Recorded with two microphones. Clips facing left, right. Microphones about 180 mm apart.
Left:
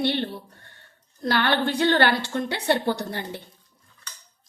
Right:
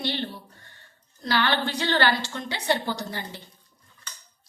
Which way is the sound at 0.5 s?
55° left (ahead or behind).